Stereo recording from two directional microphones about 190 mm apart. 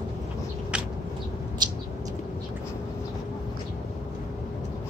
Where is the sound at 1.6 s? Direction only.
20° right (ahead or behind).